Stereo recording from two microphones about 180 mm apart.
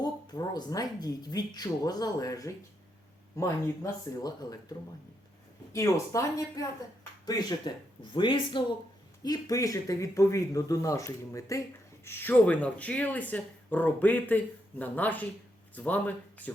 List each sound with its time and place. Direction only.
0.0 s speech: 20° left (ahead or behind)
4.2 s speech: 20° left (ahead or behind)
5.7 s speech: 15° left (ahead or behind)